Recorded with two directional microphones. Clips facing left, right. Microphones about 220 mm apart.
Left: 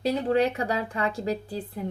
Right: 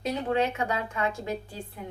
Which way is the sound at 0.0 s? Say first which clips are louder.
Left 4 dB; 35° left (ahead or behind).